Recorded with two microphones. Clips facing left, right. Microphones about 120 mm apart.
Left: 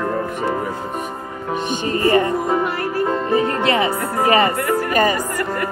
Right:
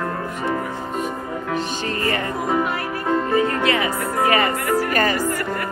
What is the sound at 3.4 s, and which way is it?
Music, 25° left (ahead or behind).